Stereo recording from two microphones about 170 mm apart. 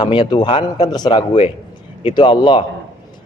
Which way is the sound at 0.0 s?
25° left (ahead or behind).